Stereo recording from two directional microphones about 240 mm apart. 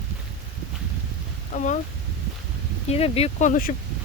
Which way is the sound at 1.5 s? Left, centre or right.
Left.